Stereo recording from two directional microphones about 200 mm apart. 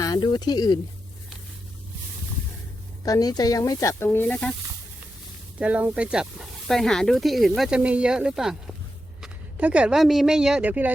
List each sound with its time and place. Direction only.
0.0 s speech: 20° left (ahead or behind)
3.0 s speech: 20° left (ahead or behind)
5.5 s a woman's voice: 5° right (ahead or behind)